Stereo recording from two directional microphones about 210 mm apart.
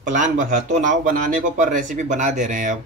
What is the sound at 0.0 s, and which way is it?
Speech, 35° right (ahead or behind).